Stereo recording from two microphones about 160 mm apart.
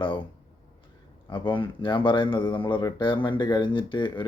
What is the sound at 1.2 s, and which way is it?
Speech, 30° left (ahead or behind).